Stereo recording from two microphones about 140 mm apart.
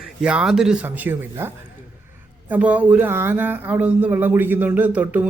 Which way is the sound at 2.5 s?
10° right (ahead or behind).